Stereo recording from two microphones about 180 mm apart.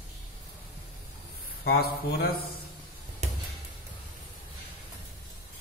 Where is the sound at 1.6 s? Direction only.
60° left (ahead or behind).